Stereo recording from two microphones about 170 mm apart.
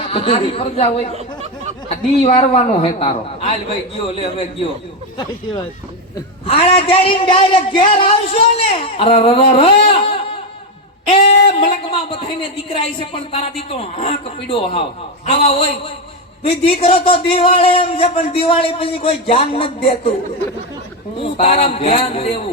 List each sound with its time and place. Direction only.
0.1 s speech: 35° left (ahead or behind)
1.1 s a sound: 40° right (ahead or behind)
2.2 s speech: 35° left (ahead or behind)
6.4 s speech: 35° left (ahead or behind)
21.3 s speech: 35° left (ahead or behind)